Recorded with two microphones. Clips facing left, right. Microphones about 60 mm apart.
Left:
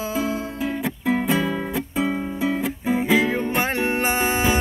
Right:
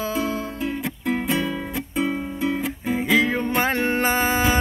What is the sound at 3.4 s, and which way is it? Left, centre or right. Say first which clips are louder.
Music: right 1 dB; right.